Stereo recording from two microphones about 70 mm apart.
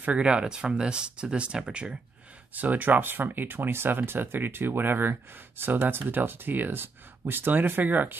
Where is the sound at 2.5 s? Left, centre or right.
Right.